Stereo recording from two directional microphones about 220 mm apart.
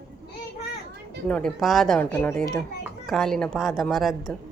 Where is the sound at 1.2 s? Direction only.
5° left (ahead or behind).